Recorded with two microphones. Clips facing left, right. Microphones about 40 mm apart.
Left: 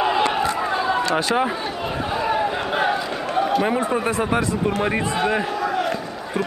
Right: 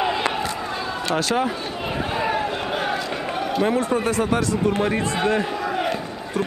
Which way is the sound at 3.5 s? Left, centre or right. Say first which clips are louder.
Even; centre.